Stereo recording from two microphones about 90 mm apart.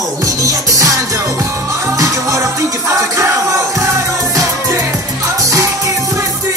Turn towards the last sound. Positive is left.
turn(degrees=-35)  # may be behind; listen again after turning